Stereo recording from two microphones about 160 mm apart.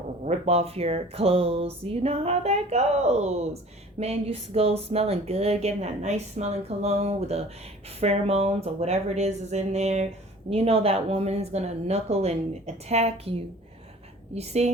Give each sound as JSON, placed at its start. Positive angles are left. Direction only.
{"t": 0.3, "sound": "speech", "side_deg": -40}